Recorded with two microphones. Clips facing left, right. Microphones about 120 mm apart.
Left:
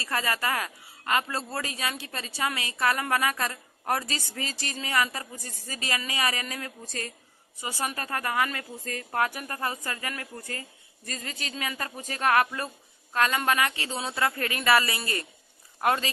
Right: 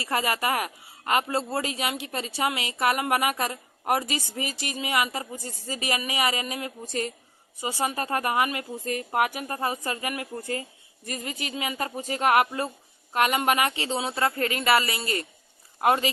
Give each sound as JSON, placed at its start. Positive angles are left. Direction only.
{"t": 0.0, "sound": "speech", "side_deg": -20}